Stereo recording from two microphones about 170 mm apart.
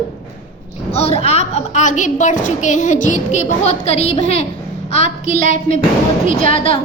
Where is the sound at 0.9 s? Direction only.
35° left (ahead or behind).